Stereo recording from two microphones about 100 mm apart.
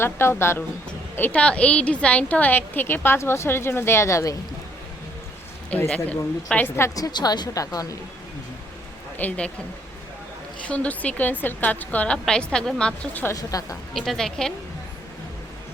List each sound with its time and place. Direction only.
0.0 s a woman's voice: 25° left (ahead or behind)
5.9 s a woman's voice: 10° left (ahead or behind)
6.9 s a woman's voice: 40° left (ahead or behind)
9.1 s a woman's voice: 15° left (ahead or behind)
10.7 s a woman's voice: 15° left (ahead or behind)
13.3 s a woman's voice: 35° left (ahead or behind)
13.9 s a woman's voice: 5° left (ahead or behind)